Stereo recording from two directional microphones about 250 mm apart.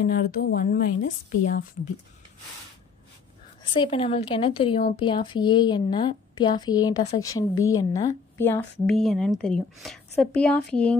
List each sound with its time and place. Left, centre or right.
0.0 s a woman's voice: left
3.7 s a woman's voice: left; by 11.0 s centre